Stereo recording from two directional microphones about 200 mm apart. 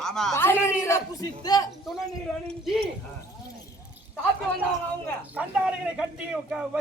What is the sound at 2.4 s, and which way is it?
Speech, centre (ahead or behind).